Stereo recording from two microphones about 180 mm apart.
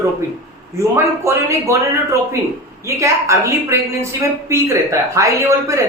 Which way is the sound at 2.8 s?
15° right (ahead or behind).